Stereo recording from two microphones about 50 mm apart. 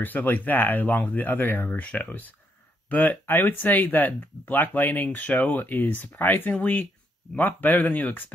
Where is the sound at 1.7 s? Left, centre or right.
Left.